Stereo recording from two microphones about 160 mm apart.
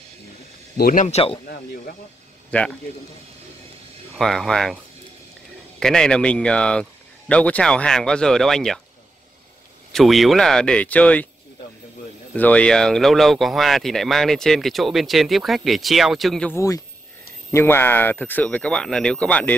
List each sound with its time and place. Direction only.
0.7 s speech: 65° left (ahead or behind)
1.0 s speech: 40° left (ahead or behind)
1.4 s speech: 65° left (ahead or behind)
2.5 s speech: 5° left (ahead or behind)
4.2 s speech: centre (ahead or behind)
5.8 s speech: 5° left (ahead or behind)
9.9 s speech: centre (ahead or behind)
12.4 s speech: 10° left (ahead or behind)
16.5 s speech: 20° left (ahead or behind)